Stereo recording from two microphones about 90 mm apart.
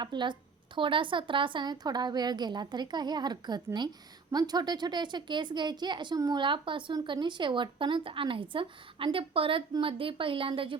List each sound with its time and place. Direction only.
0.0 s speech: 60° right (ahead or behind)
0.8 s a woman's voice: 70° right (ahead or behind)
6.1 s a woman's voice: 40° right (ahead or behind)
6.4 s a woman's voice: 65° right (ahead or behind)